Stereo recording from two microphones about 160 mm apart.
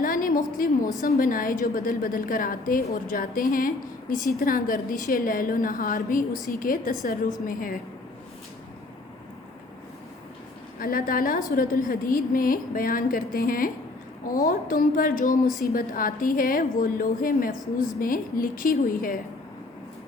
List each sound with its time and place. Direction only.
0.0 s a sound: 60° left (ahead or behind)
1.0 s a woman's voice: 60° left (ahead or behind)
10.8 s a woman's voice: 65° left (ahead or behind)